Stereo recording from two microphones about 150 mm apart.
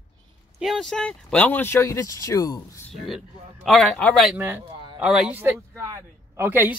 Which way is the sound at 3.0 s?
Centre (ahead or behind).